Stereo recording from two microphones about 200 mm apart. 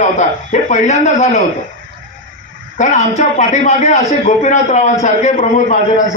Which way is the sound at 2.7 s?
35° left (ahead or behind).